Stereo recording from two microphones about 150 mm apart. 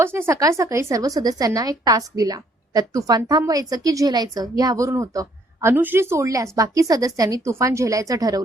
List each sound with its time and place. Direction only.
0.0 s a woman's voice: 15° right (ahead or behind)